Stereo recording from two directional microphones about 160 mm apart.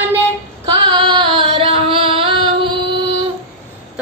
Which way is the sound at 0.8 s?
30° right (ahead or behind).